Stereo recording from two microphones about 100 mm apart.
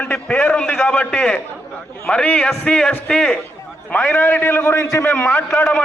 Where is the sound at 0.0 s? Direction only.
20° left (ahead or behind).